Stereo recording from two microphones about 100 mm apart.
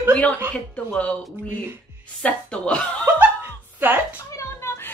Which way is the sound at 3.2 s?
20° right (ahead or behind).